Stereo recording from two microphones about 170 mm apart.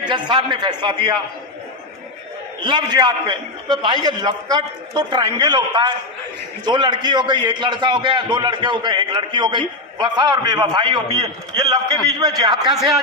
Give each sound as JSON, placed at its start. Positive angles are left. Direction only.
{"t": 0.1, "sound": "a man's voice", "side_deg": -25}
{"t": 2.6, "sound": "a man's voice", "side_deg": -25}